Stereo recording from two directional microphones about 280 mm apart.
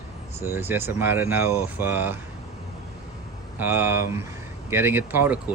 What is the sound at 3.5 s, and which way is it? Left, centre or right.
Speech, centre.